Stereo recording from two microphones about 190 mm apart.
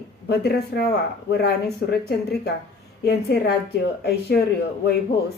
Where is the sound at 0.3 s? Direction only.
60° left (ahead or behind).